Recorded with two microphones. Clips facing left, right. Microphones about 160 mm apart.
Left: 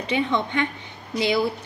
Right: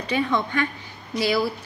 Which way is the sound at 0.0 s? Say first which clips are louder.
Even; 25° left (ahead or behind).